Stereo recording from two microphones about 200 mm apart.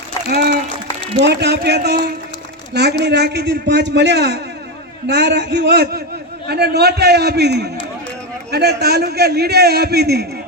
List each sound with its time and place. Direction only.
0.3 s a man's voice: 55° right (ahead or behind)
3.0 s a man's voice: 55° right (ahead or behind)